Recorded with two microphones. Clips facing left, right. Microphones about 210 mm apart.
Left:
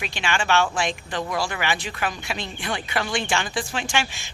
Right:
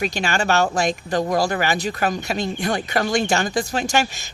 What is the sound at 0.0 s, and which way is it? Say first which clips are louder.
Speech: right 5 dB; 40° right (ahead or behind).